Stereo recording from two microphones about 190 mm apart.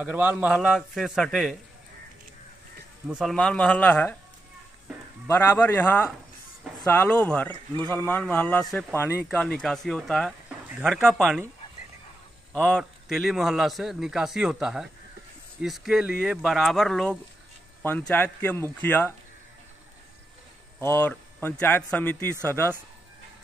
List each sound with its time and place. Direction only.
0.0 s speech: 10° right (ahead or behind)
3.1 s a man's voice: centre (ahead or behind)
5.6 s a man's voice: 5° left (ahead or behind)
9.0 s speech: 10° right (ahead or behind)
9.4 s speech: 5° left (ahead or behind)
12.6 s a man's voice: centre (ahead or behind)
20.8 s a man's voice: 10° left (ahead or behind)
22.3 s speech: 15° right (ahead or behind)